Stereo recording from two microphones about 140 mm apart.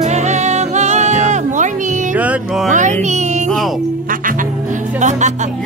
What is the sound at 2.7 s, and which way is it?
Music, 60° right (ahead or behind).